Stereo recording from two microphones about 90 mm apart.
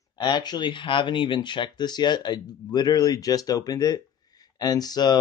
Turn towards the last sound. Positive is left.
turn(degrees=50)  # may be behind; listen again after turning